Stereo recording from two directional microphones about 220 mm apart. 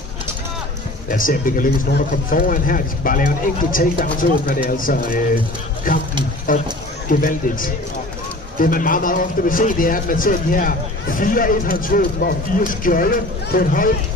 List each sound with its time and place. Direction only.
1.1 s a man's voice: 40° left (ahead or behind)